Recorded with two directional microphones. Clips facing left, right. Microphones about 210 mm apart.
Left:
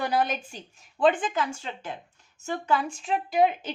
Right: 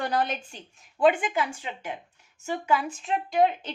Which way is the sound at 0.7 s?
5° right (ahead or behind).